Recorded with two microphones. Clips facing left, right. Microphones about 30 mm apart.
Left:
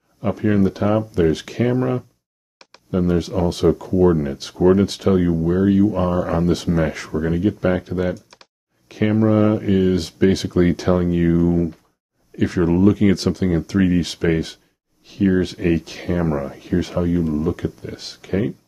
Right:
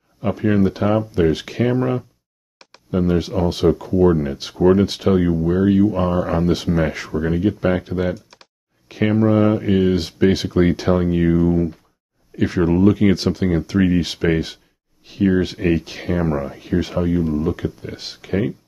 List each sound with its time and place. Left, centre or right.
0.2 s speech: centre
2.6 s a sound: centre
3.0 s speech: centre